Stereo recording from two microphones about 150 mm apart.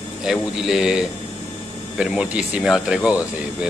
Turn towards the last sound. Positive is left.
turn(degrees=-5)  # may be behind; listen again after turning